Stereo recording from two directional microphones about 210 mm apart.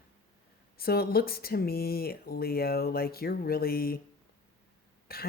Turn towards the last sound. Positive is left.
turn(degrees=45)  # may be behind; listen again after turning